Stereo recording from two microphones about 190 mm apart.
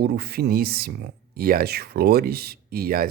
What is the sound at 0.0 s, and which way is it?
Speech, 55° right (ahead or behind).